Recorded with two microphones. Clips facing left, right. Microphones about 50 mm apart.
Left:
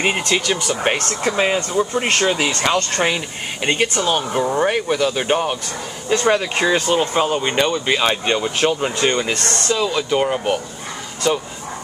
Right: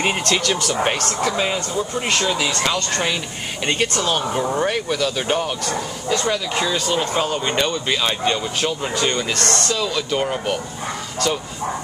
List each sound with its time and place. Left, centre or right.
0.0 s speech: centre
0.9 s speech: left
3.6 s speech: centre
6.0 s speech: left; by 11.4 s centre